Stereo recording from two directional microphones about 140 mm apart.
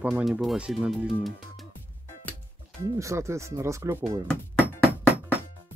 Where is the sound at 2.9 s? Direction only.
20° right (ahead or behind).